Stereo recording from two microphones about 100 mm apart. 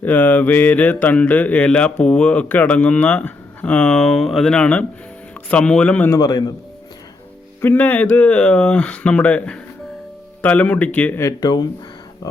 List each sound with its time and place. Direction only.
0.0 s a man's voice: 20° left (ahead or behind)
6.1 s speech: 35° left (ahead or behind)
7.6 s speech: 20° left (ahead or behind)
11.2 s speech: 40° left (ahead or behind)